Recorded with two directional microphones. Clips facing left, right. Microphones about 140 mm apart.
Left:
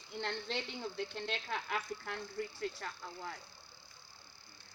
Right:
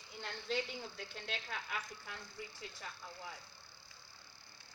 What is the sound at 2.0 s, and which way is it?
Speech, 55° left (ahead or behind).